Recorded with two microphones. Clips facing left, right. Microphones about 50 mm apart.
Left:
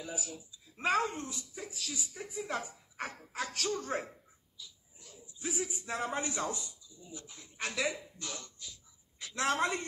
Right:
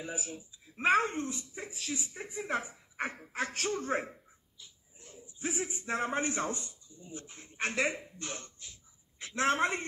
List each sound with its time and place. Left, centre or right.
0.0 s a woman's voice: right